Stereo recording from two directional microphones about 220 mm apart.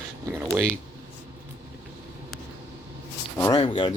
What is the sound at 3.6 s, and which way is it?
Speech, 20° left (ahead or behind).